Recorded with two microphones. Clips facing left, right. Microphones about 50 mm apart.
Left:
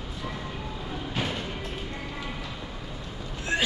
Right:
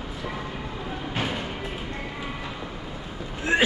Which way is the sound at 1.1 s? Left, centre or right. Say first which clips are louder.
Right 2 dB; centre.